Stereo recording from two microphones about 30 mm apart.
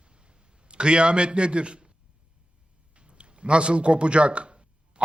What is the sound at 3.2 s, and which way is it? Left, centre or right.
A man's voice, right.